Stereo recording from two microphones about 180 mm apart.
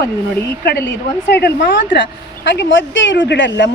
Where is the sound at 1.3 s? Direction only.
70° left (ahead or behind).